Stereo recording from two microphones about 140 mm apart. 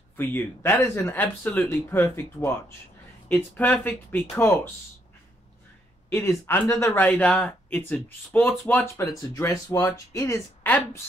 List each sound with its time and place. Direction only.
0.2 s speech: 15° left (ahead or behind)
6.0 s speech: 15° left (ahead or behind)